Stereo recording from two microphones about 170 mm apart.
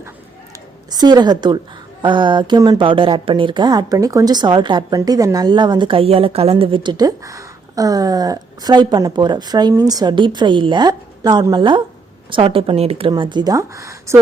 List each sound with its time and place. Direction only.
0.9 s a woman's voice: 25° right (ahead or behind)